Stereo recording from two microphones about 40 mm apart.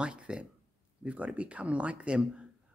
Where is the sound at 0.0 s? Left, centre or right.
Right.